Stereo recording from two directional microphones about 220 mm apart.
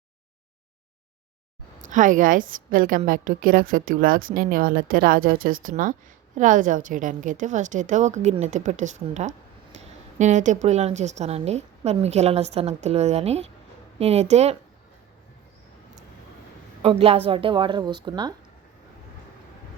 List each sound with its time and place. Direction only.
1.8 s a woman's voice: 35° right (ahead or behind)
16.8 s speech: 25° right (ahead or behind)